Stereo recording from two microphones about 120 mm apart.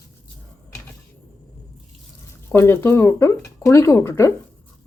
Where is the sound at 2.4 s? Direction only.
20° left (ahead or behind).